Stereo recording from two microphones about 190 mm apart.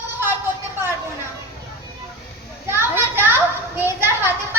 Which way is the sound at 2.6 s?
10° right (ahead or behind).